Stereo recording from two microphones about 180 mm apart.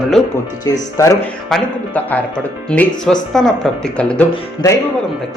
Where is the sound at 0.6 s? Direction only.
20° left (ahead or behind).